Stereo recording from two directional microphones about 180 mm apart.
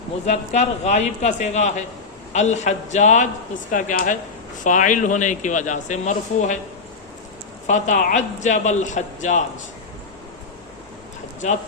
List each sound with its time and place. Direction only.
0.3 s a man's voice: 40° left (ahead or behind)
7.7 s a man's voice: 45° left (ahead or behind)
11.4 s speech: 40° left (ahead or behind)